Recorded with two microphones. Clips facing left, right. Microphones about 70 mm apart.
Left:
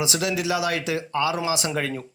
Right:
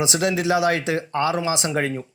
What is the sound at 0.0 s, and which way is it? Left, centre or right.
Speech, right.